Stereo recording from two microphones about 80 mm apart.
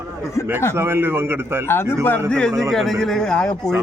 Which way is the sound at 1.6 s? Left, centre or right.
Left.